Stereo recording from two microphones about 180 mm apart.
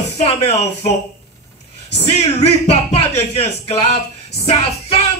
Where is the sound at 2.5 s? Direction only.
35° left (ahead or behind).